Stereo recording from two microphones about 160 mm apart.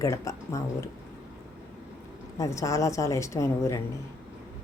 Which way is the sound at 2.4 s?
20° left (ahead or behind).